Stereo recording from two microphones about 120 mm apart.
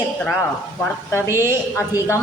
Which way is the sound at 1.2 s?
20° right (ahead or behind).